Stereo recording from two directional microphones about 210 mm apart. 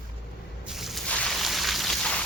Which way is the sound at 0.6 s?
Centre (ahead or behind).